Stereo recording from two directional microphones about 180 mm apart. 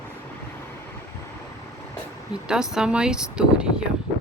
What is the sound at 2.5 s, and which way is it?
A woman's voice, 5° right (ahead or behind).